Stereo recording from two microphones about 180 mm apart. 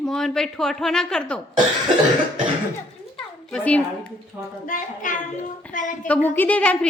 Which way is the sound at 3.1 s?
5° left (ahead or behind).